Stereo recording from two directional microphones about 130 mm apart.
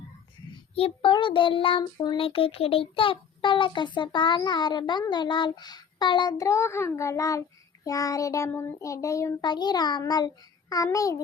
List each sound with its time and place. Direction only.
0.8 s child singing: 45° left (ahead or behind); by 11.2 s 25° left (ahead or behind)